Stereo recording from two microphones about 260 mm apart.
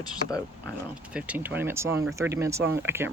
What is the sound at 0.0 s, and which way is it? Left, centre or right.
Speech, centre.